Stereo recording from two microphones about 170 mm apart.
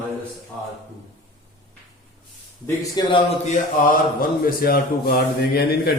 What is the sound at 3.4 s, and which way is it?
Speech, 50° left (ahead or behind).